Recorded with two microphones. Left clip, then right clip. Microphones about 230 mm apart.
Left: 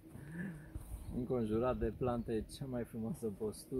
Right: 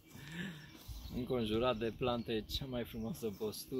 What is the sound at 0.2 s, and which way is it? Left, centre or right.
Dog, centre.